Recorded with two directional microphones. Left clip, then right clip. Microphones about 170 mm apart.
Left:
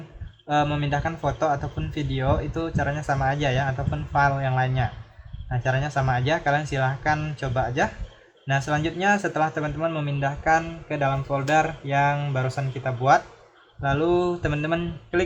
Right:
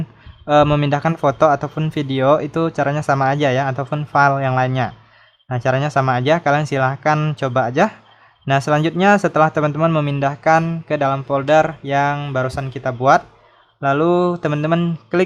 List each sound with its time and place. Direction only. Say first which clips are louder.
0.4 s speech: right 10 dB; 45° right (ahead or behind)